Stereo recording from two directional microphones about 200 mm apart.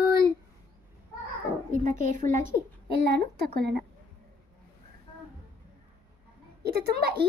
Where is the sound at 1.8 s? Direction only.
40° right (ahead or behind).